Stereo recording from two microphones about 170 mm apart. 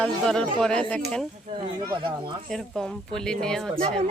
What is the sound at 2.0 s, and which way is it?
Speech, 30° right (ahead or behind).